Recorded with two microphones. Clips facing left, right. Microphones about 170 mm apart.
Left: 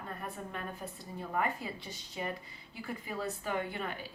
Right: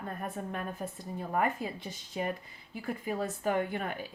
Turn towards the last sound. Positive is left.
turn(degrees=-50)  # may be behind; listen again after turning